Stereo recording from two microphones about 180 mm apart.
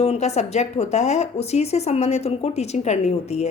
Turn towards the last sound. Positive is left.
turn(degrees=35)  # may be behind; listen again after turning